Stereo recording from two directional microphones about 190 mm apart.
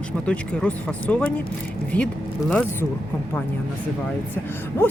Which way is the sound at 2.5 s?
5° left (ahead or behind).